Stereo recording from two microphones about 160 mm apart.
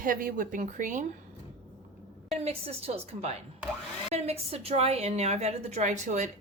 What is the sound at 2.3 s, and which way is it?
A woman's voice, 40° right (ahead or behind).